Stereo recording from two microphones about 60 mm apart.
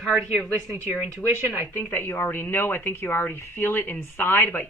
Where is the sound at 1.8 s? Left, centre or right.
Left.